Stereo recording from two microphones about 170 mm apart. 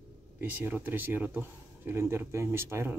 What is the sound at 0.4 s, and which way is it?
Speech, 10° right (ahead or behind).